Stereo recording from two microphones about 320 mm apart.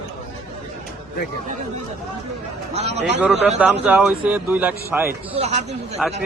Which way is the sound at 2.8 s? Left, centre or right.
Centre.